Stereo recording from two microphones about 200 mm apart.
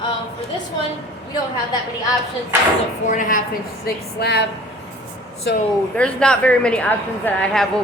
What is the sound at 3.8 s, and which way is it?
Speech, 55° left (ahead or behind).